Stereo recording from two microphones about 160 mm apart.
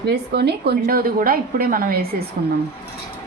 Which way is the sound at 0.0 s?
90° right.